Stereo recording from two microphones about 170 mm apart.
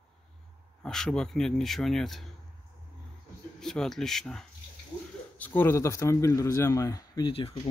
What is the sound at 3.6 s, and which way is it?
Speech, 5° left (ahead or behind).